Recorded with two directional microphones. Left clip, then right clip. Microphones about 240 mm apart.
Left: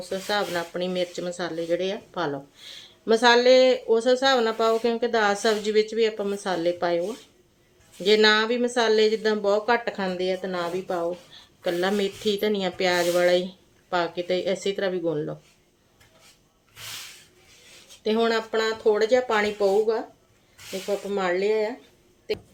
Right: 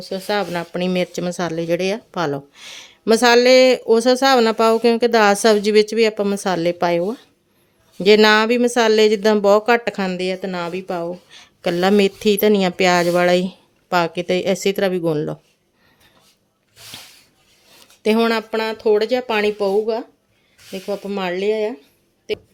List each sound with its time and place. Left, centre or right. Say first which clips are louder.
0.0 s speech: right 5 dB; right
8.0 s speech: right 7 dB; right
18.0 s speech: right 6 dB; right
21.1 s speech: right 3 dB; right